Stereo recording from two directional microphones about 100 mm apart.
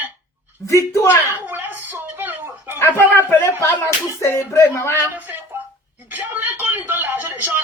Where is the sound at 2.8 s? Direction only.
25° left (ahead or behind).